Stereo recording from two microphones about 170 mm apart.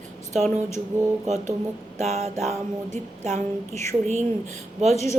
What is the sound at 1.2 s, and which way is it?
Speech, 45° right (ahead or behind).